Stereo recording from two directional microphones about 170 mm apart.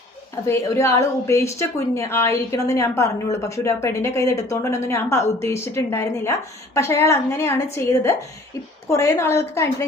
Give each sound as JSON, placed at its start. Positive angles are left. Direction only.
{"t": 0.4, "sound": "a woman's voice", "side_deg": 15}